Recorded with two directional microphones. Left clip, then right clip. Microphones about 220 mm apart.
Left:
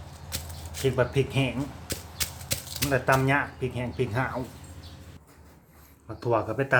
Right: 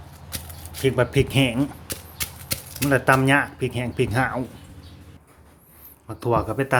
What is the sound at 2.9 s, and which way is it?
Speech, 40° right (ahead or behind).